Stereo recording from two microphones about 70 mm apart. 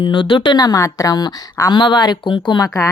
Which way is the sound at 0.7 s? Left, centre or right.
Left.